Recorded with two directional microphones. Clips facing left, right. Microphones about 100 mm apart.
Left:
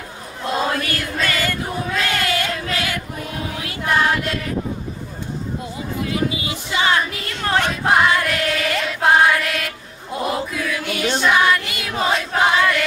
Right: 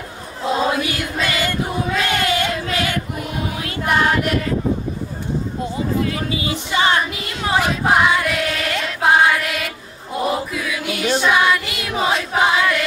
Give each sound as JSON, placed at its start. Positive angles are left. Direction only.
{"t": 0.4, "sound": "choir", "side_deg": -5}
{"t": 2.0, "sound": "child singing", "side_deg": -20}
{"t": 6.4, "sound": "music", "side_deg": -30}
{"t": 7.0, "sound": "female singing", "side_deg": -5}
{"t": 10.1, "sound": "music", "side_deg": -5}